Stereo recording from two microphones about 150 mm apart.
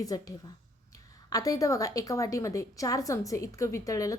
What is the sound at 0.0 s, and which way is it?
A woman's voice, 25° left (ahead or behind).